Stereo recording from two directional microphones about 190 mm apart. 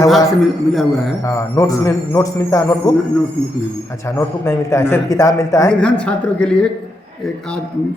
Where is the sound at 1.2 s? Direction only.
15° left (ahead or behind).